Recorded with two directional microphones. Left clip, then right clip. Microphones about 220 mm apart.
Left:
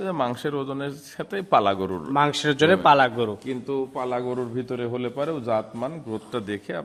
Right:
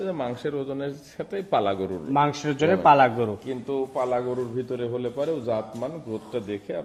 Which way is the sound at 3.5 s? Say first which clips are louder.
Even; 45° left (ahead or behind).